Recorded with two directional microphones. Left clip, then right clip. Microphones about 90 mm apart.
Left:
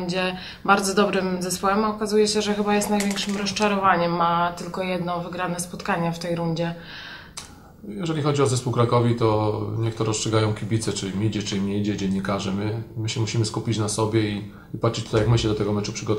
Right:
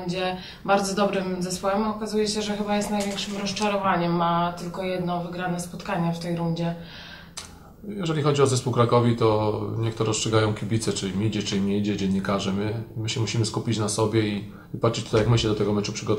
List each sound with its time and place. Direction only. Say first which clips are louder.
0.0 s a woman's voice: left 2 dB; 30° left (ahead or behind)
8.0 s speech: right 1 dB; centre (ahead or behind)